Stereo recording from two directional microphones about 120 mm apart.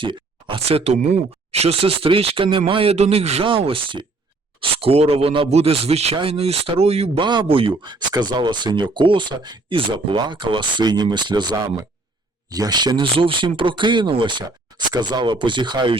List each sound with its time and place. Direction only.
0.0 s speech: 45° right (ahead or behind); by 7.1 s 60° right (ahead or behind)
7.2 s speech: 40° right (ahead or behind)